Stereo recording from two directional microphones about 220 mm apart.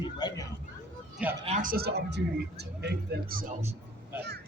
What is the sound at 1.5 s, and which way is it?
Speech, 40° right (ahead or behind).